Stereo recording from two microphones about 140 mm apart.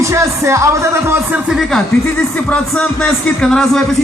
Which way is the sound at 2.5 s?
10° left (ahead or behind).